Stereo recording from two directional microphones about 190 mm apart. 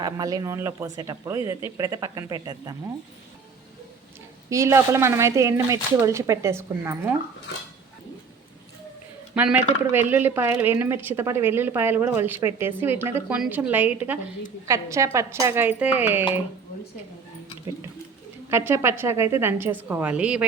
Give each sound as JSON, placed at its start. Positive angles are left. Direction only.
{"t": 0.0, "sound": "a woman's voice", "side_deg": -20}
{"t": 4.4, "sound": "a woman's voice", "side_deg": -15}
{"t": 9.3, "sound": "a woman's voice", "side_deg": -10}
{"t": 18.5, "sound": "a woman's voice", "side_deg": -15}